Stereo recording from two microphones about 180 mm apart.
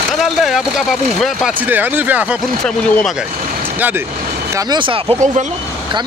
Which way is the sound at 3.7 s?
10° right (ahead or behind).